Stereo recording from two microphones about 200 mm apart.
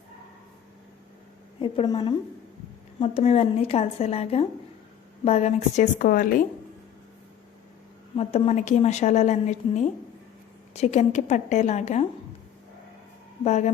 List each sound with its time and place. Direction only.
1.5 s a woman's voice: 25° left (ahead or behind); by 6.4 s 45° left (ahead or behind)
8.1 s a woman's voice: 30° left (ahead or behind)
13.4 s a woman's voice: 35° left (ahead or behind)